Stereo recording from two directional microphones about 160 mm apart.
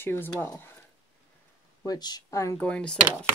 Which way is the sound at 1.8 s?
25° left (ahead or behind).